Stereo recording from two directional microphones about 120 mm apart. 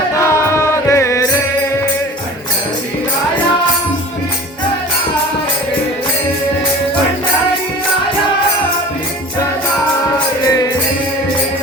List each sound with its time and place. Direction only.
0.2 s music: 20° left (ahead or behind)
10.4 s music: 30° left (ahead or behind)